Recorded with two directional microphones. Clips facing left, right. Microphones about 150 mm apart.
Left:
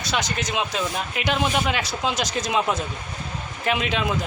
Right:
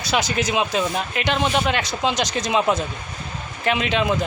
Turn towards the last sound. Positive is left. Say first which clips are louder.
# right 3 dB
turn(degrees=0)  # may be behind; listen again after turning